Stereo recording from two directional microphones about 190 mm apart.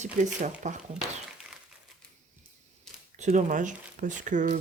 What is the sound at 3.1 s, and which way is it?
Speech, 40° right (ahead or behind).